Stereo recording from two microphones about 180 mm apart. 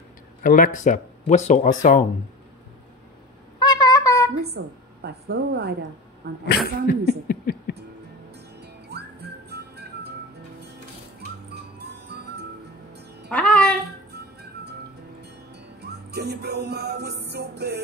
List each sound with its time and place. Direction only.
0.4 s speech: 50° left (ahead or behind)
3.5 s a sound: 20° left (ahead or behind)
4.6 s a woman's voice: 75° right (ahead or behind)
6.4 s speech: 60° left (ahead or behind)
8.5 s music: 65° right (ahead or behind)
11.8 s music: 65° right (ahead or behind)
13.3 s music: 5° left (ahead or behind)
14.1 s music: 65° right (ahead or behind)